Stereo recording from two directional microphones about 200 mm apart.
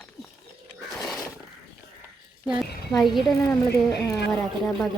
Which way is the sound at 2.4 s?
5° right (ahead or behind).